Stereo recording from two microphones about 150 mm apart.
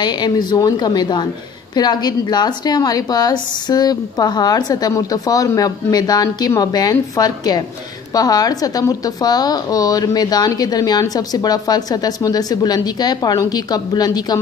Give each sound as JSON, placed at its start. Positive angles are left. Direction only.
{"t": 0.0, "sound": "speech", "side_deg": 30}